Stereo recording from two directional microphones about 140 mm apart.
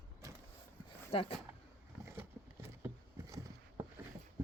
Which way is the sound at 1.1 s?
40° left (ahead or behind).